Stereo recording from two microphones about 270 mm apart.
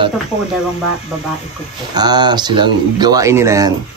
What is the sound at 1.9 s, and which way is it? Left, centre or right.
Speech, centre.